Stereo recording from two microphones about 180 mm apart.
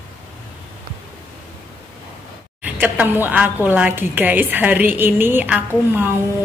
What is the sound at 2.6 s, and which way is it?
A woman's voice, 10° right (ahead or behind).